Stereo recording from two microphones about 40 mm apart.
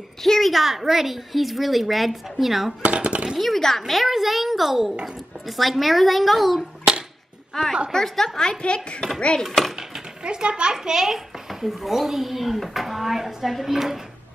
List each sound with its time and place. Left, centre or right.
0.2 s a woman's voice: centre
2.8 s speech: right
3.3 s a woman's voice: centre
8.4 s speech: left
9.8 s a child's voice: centre